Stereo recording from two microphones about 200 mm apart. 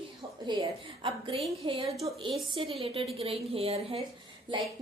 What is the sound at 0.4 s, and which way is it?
A woman's voice, 25° right (ahead or behind).